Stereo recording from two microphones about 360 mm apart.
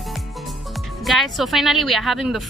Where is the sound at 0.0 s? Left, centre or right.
Centre.